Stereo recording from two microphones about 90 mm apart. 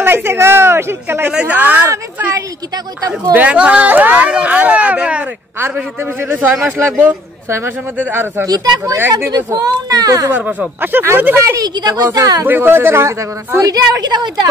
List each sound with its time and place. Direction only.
0.0 s a man's voice: 25° right (ahead or behind)
1.3 s speech: 15° right (ahead or behind)
2.3 s speech: 45° right (ahead or behind)
3.3 s speech: 15° right (ahead or behind)
5.6 s a man's voice: 25° right (ahead or behind)
8.5 s speech: 45° right (ahead or behind)
10.3 s a man's voice: 20° right (ahead or behind)
11.5 s a woman's voice: 50° right (ahead or behind)
12.4 s a man's voice: 25° right (ahead or behind)
13.7 s speech: 45° right (ahead or behind)